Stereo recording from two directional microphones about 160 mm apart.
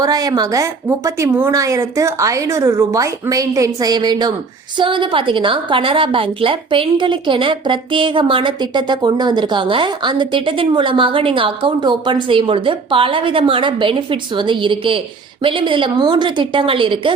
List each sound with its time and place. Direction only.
0.0 s a woman's voice: 25° right (ahead or behind)